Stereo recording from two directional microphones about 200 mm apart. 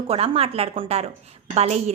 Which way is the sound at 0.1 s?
30° right (ahead or behind).